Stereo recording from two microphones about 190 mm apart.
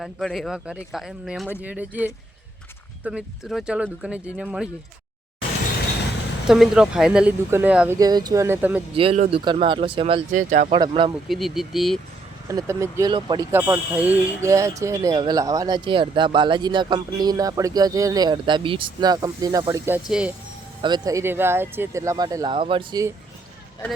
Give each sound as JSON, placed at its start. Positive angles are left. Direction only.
{"t": 0.0, "sound": "speech", "side_deg": 0}
{"t": 6.5, "sound": "speech", "side_deg": -5}
{"t": 7.9, "sound": "speech", "side_deg": -20}
{"t": 9.0, "sound": "speech", "side_deg": -35}
{"t": 10.3, "sound": "speech", "side_deg": -45}
{"t": 10.7, "sound": "speech", "side_deg": -25}
{"t": 11.3, "sound": "speech", "side_deg": 0}
{"t": 12.5, "sound": "speech", "side_deg": -15}
{"t": 13.5, "sound": "speech", "side_deg": -10}
{"t": 20.8, "sound": "speech", "side_deg": -20}